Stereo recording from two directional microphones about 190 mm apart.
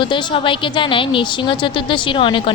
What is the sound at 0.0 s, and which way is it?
A woman's voice, 25° left (ahead or behind).